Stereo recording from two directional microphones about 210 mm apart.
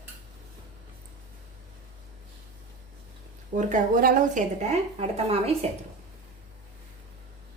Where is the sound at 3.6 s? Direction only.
40° right (ahead or behind).